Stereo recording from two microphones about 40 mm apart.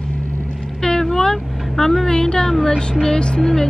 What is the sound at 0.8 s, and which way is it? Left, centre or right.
Vehicle, centre.